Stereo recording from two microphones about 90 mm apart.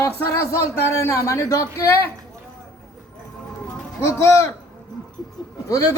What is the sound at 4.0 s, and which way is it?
Speech, 30° left (ahead or behind).